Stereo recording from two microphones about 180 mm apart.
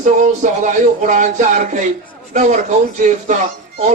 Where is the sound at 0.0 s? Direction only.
45° right (ahead or behind).